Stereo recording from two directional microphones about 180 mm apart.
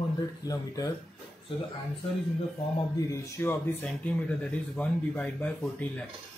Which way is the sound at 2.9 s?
15° left (ahead or behind).